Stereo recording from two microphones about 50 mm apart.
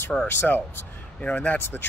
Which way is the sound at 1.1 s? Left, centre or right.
Left.